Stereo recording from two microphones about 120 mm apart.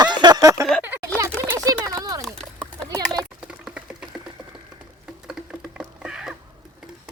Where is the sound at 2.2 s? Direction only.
5° left (ahead or behind).